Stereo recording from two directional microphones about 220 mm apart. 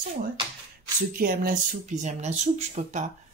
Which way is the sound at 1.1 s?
40° right (ahead or behind).